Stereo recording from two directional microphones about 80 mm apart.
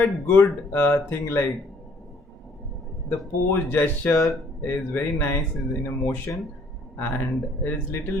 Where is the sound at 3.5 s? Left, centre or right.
Left.